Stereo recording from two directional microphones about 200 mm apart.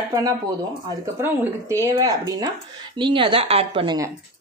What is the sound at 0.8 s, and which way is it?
A woman's voice, 10° right (ahead or behind).